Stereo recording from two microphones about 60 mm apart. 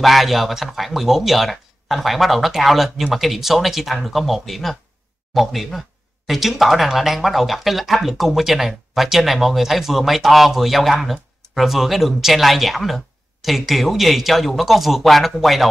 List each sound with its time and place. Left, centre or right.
0.0 s speech: centre